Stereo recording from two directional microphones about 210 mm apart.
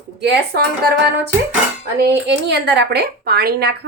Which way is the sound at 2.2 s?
55° right (ahead or behind).